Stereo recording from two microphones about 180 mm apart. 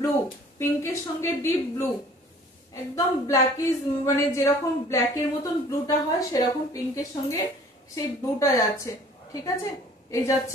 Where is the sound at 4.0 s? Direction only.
15° left (ahead or behind).